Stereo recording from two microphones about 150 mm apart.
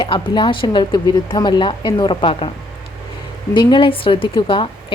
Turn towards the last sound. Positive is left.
turn(degrees=35)  # may be behind; listen again after turning